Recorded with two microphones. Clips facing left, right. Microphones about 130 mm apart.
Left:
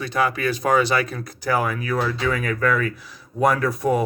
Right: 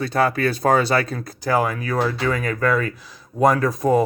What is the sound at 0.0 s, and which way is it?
Speech, 30° right (ahead or behind).